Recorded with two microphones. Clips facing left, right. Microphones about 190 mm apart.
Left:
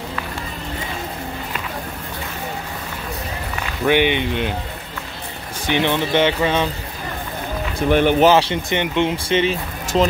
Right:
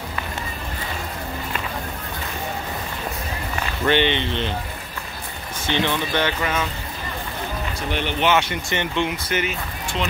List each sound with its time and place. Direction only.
3.8 s speech: 10° left (ahead or behind)
5.7 s speech: 15° left (ahead or behind)
7.9 s speech: 50° left (ahead or behind)
8.3 s speech: 30° left (ahead or behind)
8.6 s speech: 20° left (ahead or behind)
9.1 s speech: 30° left (ahead or behind)
9.9 s speech: 40° left (ahead or behind)